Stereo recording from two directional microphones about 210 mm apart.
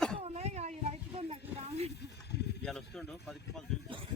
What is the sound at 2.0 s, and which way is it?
Snake, 55° left (ahead or behind).